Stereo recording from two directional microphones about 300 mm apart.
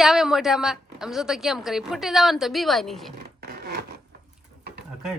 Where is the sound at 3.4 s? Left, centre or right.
Right.